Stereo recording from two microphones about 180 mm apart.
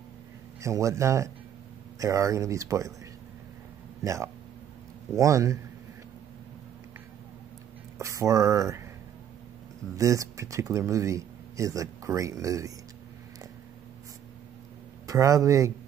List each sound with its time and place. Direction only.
0.6 s speech: 15° right (ahead or behind)
4.0 s speech: 15° right (ahead or behind)
8.0 s speech: 15° right (ahead or behind)
9.9 s speech: 15° right (ahead or behind)
15.0 s speech: 20° right (ahead or behind)